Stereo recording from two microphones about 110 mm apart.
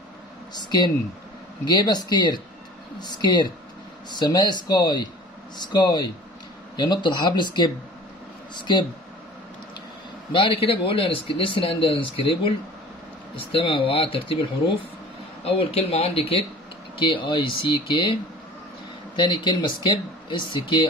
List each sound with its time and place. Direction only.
0.6 s speech: 40° left (ahead or behind)
10.3 s speech: 55° left (ahead or behind)
17.0 s speech: 50° left (ahead or behind)
19.1 s speech: 45° left (ahead or behind)